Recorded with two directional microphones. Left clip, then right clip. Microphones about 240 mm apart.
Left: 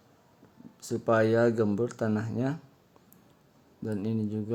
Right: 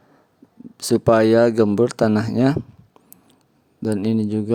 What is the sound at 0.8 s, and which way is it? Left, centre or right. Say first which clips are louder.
Speech: right 10 dB; right.